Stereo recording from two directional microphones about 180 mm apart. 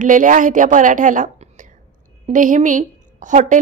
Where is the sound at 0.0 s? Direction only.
45° right (ahead or behind).